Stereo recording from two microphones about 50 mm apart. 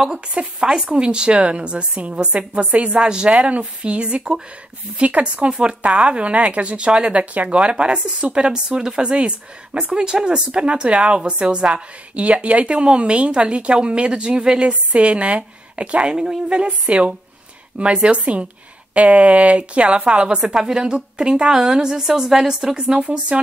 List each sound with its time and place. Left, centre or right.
0.3 s a woman's voice: right
2.9 s a woman's voice: centre
3.3 s a woman's voice: right; by 22.9 s centre
22.9 s a woman's voice: right